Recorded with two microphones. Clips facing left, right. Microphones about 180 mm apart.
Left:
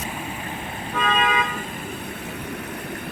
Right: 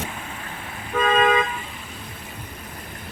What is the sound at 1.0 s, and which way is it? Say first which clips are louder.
Toot: right 5 dB; 40° right (ahead or behind).